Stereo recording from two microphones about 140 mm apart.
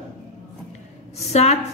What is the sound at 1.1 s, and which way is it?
Speech, 50° left (ahead or behind).